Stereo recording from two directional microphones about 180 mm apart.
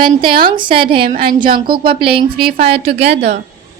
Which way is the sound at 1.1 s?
55° right (ahead or behind).